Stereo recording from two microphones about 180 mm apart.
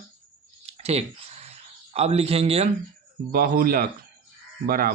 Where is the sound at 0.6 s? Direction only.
35° right (ahead or behind).